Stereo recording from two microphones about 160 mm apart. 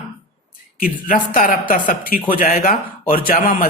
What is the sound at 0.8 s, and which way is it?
Speech, 60° left (ahead or behind).